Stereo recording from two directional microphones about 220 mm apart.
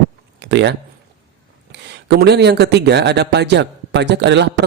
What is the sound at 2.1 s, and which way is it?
Speech, 50° right (ahead or behind).